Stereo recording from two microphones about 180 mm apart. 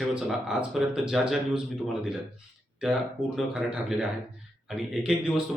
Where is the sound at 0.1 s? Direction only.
5° right (ahead or behind).